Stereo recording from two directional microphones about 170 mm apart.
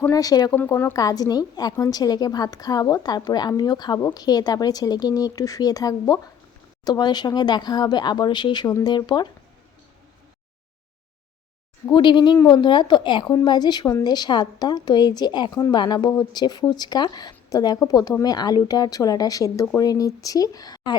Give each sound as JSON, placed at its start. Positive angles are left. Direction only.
{"t": 0.0, "sound": "a woman's voice", "side_deg": 20}
{"t": 11.9, "sound": "a woman's voice", "side_deg": 25}